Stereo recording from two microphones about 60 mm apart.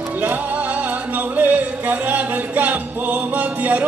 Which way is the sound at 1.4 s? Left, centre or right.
Right.